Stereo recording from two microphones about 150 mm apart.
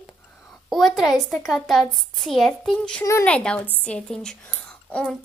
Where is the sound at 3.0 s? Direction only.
20° left (ahead or behind).